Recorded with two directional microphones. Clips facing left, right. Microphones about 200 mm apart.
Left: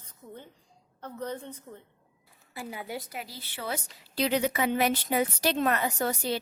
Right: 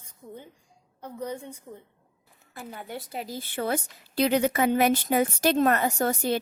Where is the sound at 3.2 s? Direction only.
50° right (ahead or behind).